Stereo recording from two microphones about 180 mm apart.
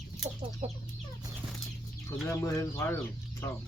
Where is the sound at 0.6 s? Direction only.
35° right (ahead or behind).